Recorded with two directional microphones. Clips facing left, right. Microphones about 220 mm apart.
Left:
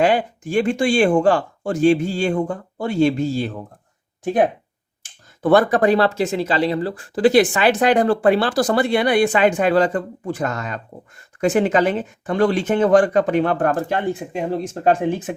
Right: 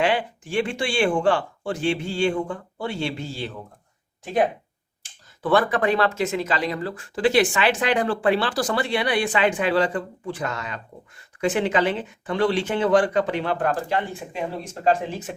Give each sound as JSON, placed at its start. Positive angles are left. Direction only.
{"t": 0.0, "sound": "speech", "side_deg": 40}
{"t": 5.0, "sound": "speech", "side_deg": 45}